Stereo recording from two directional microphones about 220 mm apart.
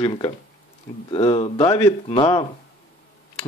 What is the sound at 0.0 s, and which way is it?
Speech, 20° left (ahead or behind).